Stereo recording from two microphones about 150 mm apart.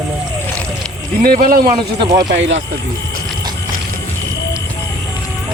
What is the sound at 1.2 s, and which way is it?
Speech, 80° right.